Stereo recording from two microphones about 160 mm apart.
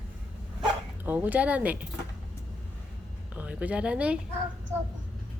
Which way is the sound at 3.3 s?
10° right (ahead or behind).